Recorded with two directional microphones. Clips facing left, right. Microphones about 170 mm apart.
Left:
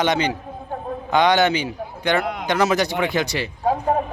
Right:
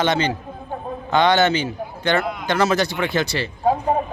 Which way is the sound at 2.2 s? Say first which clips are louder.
Left 1 dB; 75° left (ahead or behind).